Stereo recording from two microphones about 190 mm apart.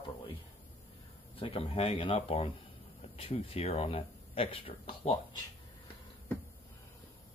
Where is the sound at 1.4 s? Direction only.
30° left (ahead or behind).